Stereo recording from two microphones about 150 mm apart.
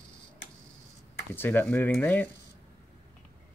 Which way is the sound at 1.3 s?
10° left (ahead or behind).